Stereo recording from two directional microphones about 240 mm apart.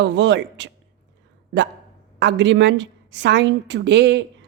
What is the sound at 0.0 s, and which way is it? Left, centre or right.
Speech, right.